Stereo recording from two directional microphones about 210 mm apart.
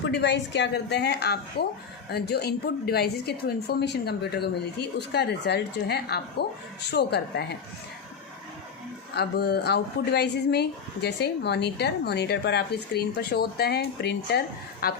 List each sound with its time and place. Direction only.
0.0 s speech: 55° left (ahead or behind)
9.1 s speech: 50° left (ahead or behind)